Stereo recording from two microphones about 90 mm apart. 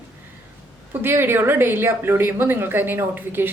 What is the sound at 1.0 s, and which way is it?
Speech, 25° right (ahead or behind).